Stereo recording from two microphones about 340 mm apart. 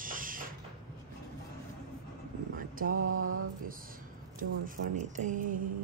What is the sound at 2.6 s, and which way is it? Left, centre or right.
Mantra, right.